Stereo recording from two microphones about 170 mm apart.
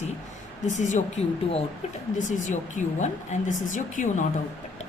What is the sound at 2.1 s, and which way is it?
Speech, 45° left (ahead or behind).